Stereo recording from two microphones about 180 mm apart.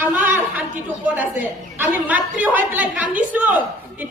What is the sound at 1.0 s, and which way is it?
Speech, 10° right (ahead or behind).